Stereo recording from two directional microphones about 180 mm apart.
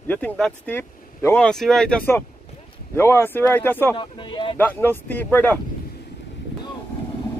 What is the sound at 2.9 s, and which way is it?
Speech, 15° left (ahead or behind).